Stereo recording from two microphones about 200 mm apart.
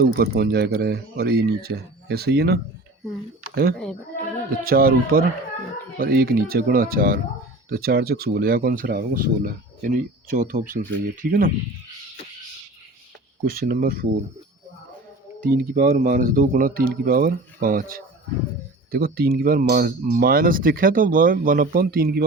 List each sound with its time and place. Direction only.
0.0 s speech: 50° right (ahead or behind)
13.4 s speech: 45° right (ahead or behind)
15.4 s speech: 45° right (ahead or behind)